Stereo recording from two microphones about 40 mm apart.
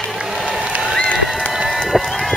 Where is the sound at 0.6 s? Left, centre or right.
Right.